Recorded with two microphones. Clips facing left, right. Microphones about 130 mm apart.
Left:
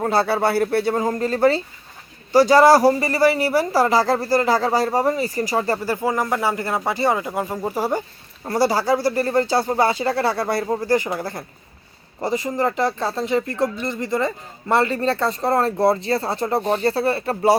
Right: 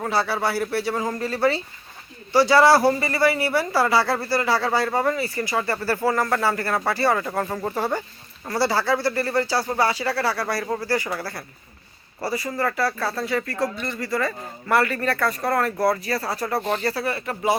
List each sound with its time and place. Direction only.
0.1 s speech: 50° left (ahead or behind)
0.9 s speech: 25° left (ahead or behind)
1.2 s speech: 45° left (ahead or behind)
5.8 s speech: 15° left (ahead or behind); by 17.6 s 30° left (ahead or behind)